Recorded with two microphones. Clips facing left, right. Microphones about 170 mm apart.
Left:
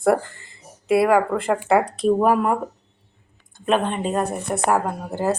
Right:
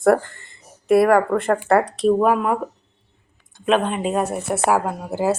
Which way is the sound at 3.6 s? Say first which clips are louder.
Right 2 dB; centre (ahead or behind).